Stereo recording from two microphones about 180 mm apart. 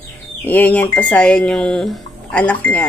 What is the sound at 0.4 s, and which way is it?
Speech, 10° left (ahead or behind).